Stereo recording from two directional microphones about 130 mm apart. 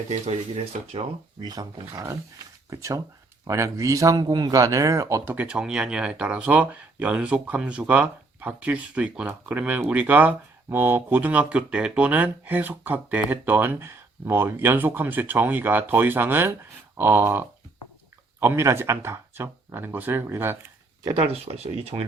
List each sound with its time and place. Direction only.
0.1 s speech: 50° right (ahead or behind)
1.4 s speech: 30° right (ahead or behind); by 20.6 s 15° right (ahead or behind)
21.2 s speech: 50° right (ahead or behind)